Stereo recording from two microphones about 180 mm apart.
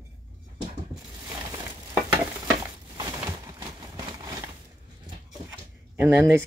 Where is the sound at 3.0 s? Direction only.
15° right (ahead or behind).